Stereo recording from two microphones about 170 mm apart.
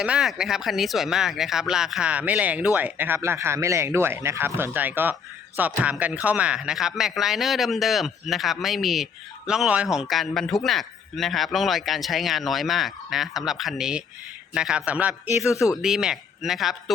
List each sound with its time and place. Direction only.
0.0 s a man's voice: 5° right (ahead or behind)
15.4 s speech: 20° left (ahead or behind)
15.8 s a man's voice: 5° right (ahead or behind)